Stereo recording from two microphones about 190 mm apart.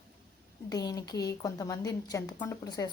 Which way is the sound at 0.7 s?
20° left (ahead or behind).